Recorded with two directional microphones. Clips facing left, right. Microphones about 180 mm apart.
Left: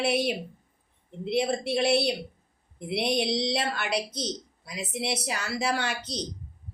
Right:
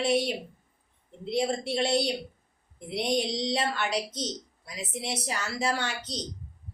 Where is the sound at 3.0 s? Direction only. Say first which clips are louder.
Left 1 dB; 70° left (ahead or behind).